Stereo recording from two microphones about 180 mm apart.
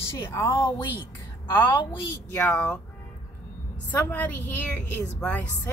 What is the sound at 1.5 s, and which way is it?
Speech, 10° left (ahead or behind).